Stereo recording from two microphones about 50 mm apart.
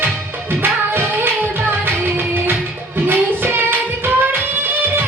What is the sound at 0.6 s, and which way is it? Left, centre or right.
Music, right.